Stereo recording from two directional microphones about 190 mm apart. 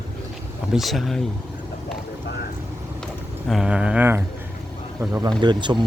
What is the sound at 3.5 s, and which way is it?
Speech, 5° right (ahead or behind).